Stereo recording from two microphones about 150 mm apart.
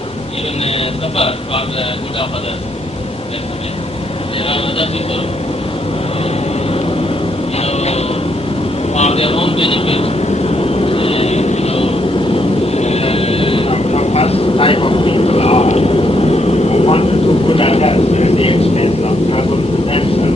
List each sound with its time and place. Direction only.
0.6 s speech: 40° left (ahead or behind)
4.4 s speech: 35° left (ahead or behind)
7.6 s a sound: 45° left (ahead or behind)
9.0 s vehicle: 45° left (ahead or behind)
19.9 s speech: 40° left (ahead or behind)